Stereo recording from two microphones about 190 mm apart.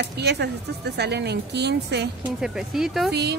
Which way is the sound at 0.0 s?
60° right (ahead or behind).